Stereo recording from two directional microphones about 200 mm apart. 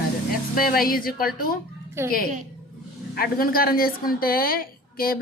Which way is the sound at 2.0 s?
15° right (ahead or behind).